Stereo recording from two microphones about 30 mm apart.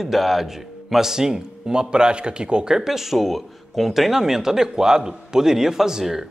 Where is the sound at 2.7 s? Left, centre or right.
Centre.